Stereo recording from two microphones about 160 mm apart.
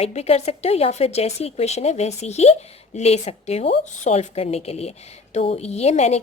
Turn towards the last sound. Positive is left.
turn(degrees=45)  # may be behind; listen again after turning